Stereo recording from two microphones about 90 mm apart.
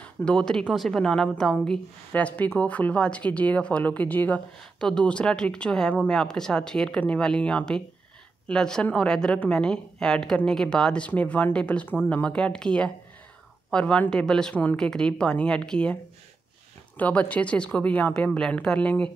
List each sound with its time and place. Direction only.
0.0 s a woman's voice: 10° left (ahead or behind)
4.7 s a woman's voice: 5° left (ahead or behind)
14.5 s a woman's voice: 20° left (ahead or behind)
14.8 s a woman's voice: 5° left (ahead or behind)